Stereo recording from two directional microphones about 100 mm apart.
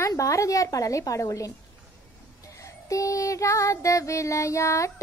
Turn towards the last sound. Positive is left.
turn(degrees=30)  # may be behind; listen again after turning